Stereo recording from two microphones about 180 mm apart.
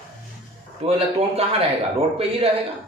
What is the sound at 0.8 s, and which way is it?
A man's voice, 35° right (ahead or behind).